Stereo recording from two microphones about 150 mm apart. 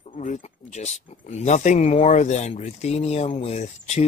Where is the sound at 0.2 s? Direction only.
50° left (ahead or behind).